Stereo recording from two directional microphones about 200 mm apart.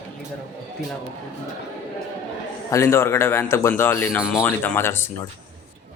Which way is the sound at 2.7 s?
15° left (ahead or behind).